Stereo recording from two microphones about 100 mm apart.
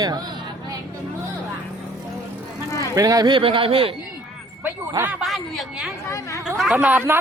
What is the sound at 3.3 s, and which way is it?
Speech, 60° right (ahead or behind).